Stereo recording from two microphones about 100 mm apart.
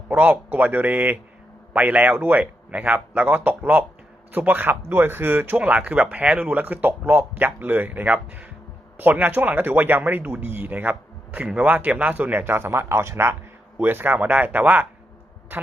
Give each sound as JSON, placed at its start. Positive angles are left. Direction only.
{"t": 0.1, "sound": "speech", "side_deg": -15}